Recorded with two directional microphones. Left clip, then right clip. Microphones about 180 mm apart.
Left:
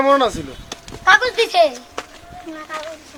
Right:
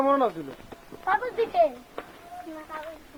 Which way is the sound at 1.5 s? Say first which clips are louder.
Left 8 dB; 5° left (ahead or behind).